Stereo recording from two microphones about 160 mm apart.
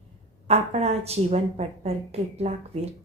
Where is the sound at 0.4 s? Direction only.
40° right (ahead or behind).